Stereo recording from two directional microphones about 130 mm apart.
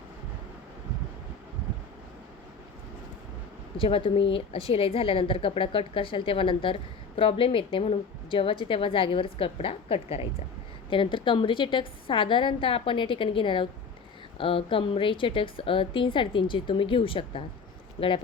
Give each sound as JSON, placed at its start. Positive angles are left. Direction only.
{"t": 3.8, "sound": "a woman's voice", "side_deg": 40}